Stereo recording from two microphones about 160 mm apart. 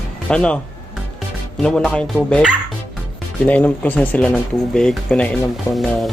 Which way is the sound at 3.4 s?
10° left (ahead or behind).